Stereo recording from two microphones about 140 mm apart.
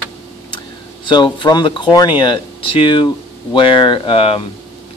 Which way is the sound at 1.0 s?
35° left (ahead or behind).